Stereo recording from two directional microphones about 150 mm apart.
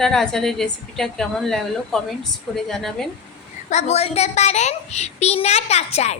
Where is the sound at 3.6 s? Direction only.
45° left (ahead or behind).